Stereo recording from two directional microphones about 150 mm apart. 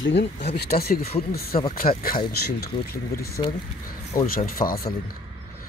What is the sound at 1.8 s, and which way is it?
Speech, 70° left (ahead or behind).